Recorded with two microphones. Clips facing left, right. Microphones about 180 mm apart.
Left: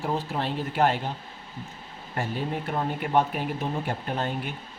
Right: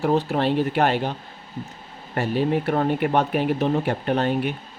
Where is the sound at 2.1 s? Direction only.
70° right (ahead or behind).